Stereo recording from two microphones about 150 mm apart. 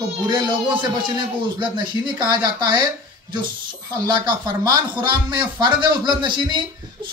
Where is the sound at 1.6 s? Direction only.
30° right (ahead or behind).